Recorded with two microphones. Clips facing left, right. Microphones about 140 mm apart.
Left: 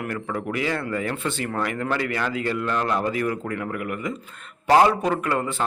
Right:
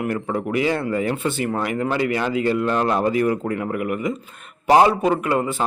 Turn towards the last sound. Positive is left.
turn(degrees=-15)  # may be behind; listen again after turning